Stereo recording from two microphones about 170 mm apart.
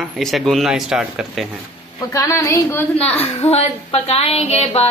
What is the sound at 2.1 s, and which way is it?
A woman's voice, 15° left (ahead or behind).